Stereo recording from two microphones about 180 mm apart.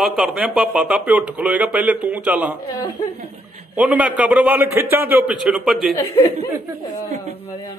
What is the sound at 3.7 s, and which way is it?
Speech, 5° right (ahead or behind).